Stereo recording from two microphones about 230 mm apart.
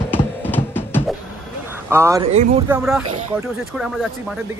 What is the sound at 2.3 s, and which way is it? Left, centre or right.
Speech, right.